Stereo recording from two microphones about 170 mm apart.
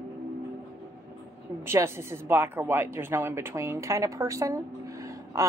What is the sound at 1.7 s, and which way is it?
A woman's voice, 15° right (ahead or behind).